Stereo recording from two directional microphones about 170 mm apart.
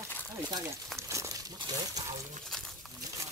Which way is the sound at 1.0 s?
20° right (ahead or behind).